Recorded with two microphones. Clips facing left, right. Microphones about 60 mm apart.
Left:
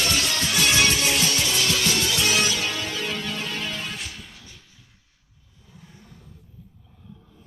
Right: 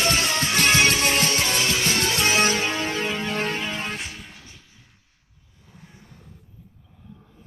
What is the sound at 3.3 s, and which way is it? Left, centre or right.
Music, right.